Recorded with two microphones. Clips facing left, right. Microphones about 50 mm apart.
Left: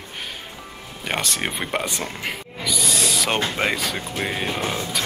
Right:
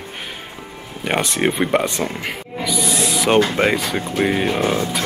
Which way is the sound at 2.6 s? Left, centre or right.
Centre.